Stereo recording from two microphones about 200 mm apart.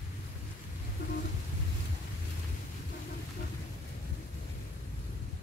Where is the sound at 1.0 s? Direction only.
55° left (ahead or behind).